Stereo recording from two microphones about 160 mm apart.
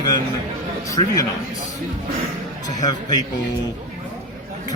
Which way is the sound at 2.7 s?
25° left (ahead or behind).